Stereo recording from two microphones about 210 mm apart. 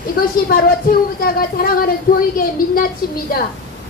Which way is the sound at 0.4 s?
45° left (ahead or behind).